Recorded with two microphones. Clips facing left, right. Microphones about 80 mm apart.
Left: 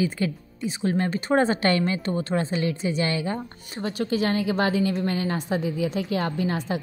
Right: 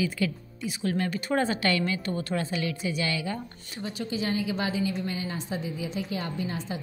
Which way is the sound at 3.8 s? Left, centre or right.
Left.